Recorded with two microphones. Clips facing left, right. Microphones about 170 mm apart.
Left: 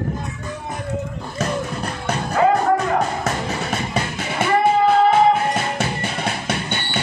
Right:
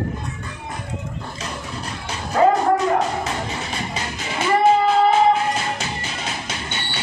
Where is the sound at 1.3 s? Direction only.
55° left (ahead or behind).